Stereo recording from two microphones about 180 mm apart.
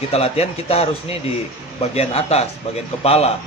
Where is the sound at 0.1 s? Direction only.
35° left (ahead or behind).